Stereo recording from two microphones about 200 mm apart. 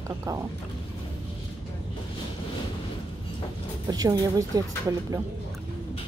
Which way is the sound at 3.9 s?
20° right (ahead or behind).